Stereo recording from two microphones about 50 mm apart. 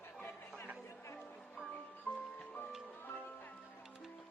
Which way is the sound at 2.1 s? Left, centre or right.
Left.